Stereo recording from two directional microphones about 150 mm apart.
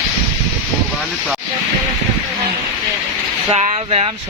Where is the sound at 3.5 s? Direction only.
45° right (ahead or behind).